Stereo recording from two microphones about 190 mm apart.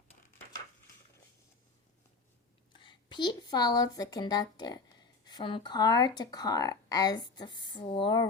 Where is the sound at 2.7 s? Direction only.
25° left (ahead or behind).